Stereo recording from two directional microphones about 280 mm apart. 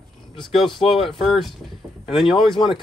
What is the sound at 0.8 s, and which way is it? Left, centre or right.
Speech, left.